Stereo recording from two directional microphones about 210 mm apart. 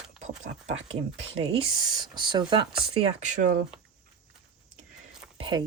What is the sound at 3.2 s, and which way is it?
Speech, 35° right (ahead or behind).